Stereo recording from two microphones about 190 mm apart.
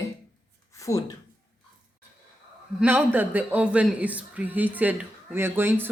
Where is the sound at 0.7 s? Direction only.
15° left (ahead or behind).